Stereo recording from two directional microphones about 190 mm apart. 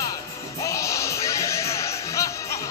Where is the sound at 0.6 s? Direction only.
15° left (ahead or behind).